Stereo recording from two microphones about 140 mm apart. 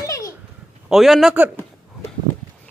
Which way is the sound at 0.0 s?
25° left (ahead or behind).